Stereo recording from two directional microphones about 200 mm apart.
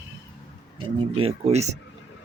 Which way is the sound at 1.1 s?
30° right (ahead or behind).